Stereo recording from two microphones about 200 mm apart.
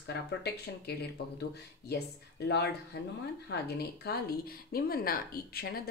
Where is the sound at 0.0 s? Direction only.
60° left (ahead or behind).